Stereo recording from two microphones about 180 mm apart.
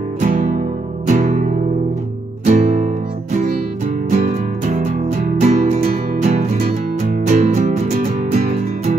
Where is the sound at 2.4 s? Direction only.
45° right (ahead or behind).